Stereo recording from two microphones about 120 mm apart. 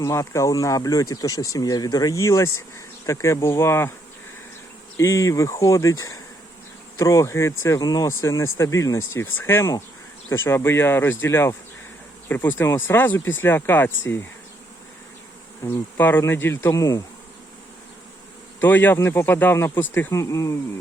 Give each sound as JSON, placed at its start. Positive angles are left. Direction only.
{"t": 0.0, "sound": "speech", "side_deg": 25}
{"t": 4.9, "sound": "speech", "side_deg": 25}
{"t": 15.6, "sound": "speech", "side_deg": 20}
{"t": 18.6, "sound": "speech", "side_deg": 15}